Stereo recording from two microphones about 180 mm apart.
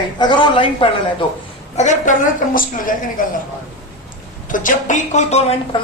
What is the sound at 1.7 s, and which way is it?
A woman's voice, 40° left (ahead or behind).